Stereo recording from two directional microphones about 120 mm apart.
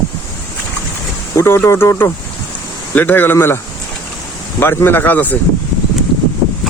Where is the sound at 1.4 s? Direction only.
20° left (ahead or behind).